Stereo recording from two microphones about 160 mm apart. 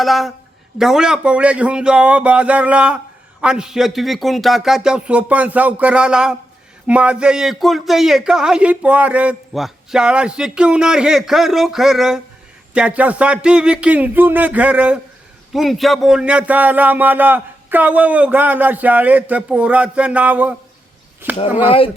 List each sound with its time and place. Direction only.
0.0 s speech: centre (ahead or behind)
21.6 s speech: 35° left (ahead or behind)